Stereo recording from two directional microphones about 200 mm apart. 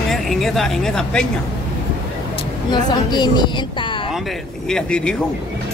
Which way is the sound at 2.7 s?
20° left (ahead or behind).